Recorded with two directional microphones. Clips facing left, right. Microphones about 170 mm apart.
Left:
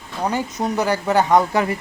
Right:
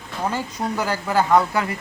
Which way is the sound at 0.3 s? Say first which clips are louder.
Left 3 dB; 20° left (ahead or behind).